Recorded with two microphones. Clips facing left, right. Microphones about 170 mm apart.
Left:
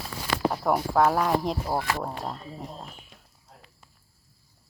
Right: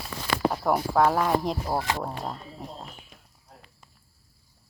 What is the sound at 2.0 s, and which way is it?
Speech, centre (ahead or behind).